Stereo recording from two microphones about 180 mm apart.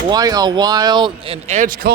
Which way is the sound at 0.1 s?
20° right (ahead or behind).